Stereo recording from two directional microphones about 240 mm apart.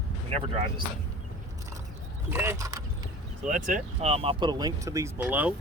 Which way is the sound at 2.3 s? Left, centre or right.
Centre.